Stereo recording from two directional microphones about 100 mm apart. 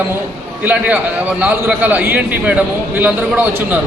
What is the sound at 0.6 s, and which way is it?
A man's voice, 15° right (ahead or behind).